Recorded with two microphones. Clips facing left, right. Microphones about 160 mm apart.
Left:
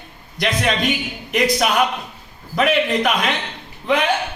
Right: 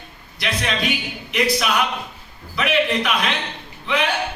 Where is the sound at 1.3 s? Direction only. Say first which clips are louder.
Left 3 dB; 45° left (ahead or behind).